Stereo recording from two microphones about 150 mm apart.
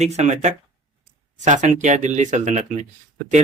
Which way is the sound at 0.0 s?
50° right (ahead or behind).